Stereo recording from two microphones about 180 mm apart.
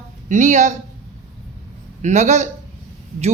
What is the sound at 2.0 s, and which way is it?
Speech, 40° right (ahead or behind).